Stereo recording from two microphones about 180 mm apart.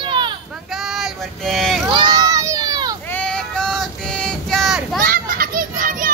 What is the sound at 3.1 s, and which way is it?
Child singing, 5° left (ahead or behind).